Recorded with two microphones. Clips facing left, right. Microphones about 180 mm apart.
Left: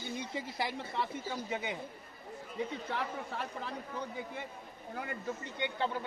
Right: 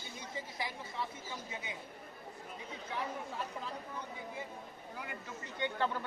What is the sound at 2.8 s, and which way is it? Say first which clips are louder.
Speech: left 2 dB; 70° left (ahead or behind).